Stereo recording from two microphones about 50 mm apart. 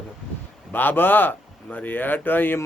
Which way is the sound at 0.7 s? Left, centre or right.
Left.